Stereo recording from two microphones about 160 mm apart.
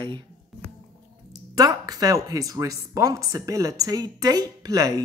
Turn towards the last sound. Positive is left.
turn(degrees=-25)  # may be behind; listen again after turning